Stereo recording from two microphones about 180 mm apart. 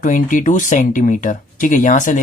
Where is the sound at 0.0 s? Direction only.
45° left (ahead or behind).